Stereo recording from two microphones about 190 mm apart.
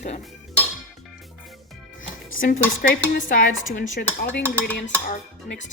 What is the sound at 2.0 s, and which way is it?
Music, 45° left (ahead or behind).